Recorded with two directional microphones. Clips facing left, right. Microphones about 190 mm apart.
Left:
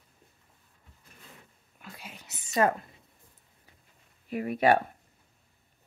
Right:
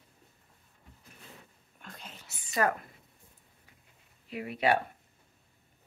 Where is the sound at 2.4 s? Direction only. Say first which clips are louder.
Left 4 dB; 25° left (ahead or behind).